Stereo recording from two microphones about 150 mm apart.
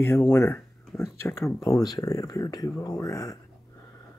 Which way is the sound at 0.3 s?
15° left (ahead or behind).